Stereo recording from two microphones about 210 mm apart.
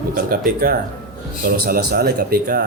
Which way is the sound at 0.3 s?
45° right (ahead or behind).